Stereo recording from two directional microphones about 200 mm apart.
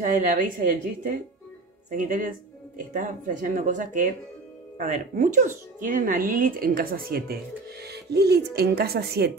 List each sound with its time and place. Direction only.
0.0 s speech: 40° right (ahead or behind)